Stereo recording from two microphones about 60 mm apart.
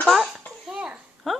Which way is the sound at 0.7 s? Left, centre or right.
Right.